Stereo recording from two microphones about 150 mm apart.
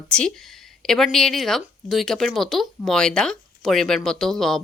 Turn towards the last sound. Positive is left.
turn(degrees=5)  # may be behind; listen again after turning